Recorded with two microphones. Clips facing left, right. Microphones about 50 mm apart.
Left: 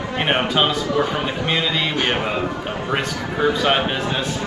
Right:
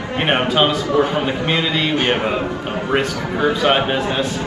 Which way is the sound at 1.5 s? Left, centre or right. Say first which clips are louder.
Even; centre.